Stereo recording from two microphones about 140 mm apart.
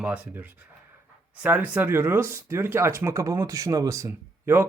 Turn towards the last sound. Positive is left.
turn(degrees=-15)  # may be behind; listen again after turning